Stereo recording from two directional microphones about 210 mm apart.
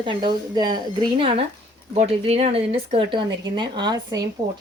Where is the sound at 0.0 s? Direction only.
20° right (ahead or behind).